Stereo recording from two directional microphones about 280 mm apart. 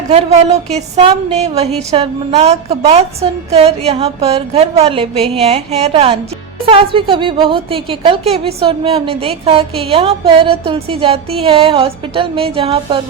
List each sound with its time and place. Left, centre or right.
0.1 s a woman's voice: right